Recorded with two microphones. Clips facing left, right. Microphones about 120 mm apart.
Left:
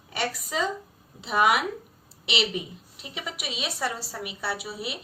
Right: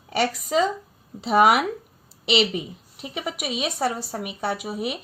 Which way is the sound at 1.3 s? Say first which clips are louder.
Right 5 dB; 55° right (ahead or behind).